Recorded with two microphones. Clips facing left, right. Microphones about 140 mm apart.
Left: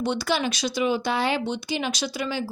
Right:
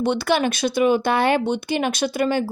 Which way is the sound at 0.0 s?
55° right (ahead or behind).